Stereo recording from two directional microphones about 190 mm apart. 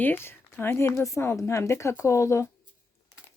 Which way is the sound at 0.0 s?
10° left (ahead or behind).